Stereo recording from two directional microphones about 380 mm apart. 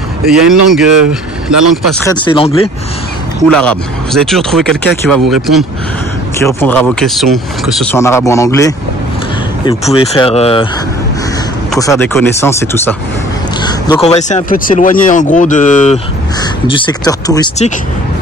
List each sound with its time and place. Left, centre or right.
0.3 s speech: centre
2.0 s speech: centre
3.5 s speech: centre
11.7 s speech: centre